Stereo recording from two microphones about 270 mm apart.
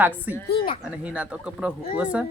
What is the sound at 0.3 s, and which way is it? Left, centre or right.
A woman's voice, centre.